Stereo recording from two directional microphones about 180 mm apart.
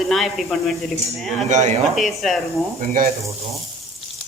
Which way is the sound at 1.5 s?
40° right (ahead or behind).